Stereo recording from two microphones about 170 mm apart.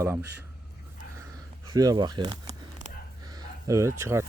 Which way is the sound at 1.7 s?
25° right (ahead or behind).